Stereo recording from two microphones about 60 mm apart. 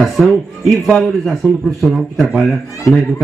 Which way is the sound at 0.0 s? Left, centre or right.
Centre.